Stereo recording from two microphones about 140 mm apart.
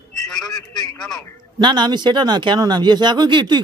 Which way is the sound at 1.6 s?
30° right (ahead or behind).